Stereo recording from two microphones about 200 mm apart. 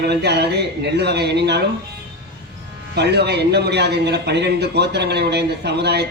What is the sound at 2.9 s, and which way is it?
A man's voice, 55° right (ahead or behind).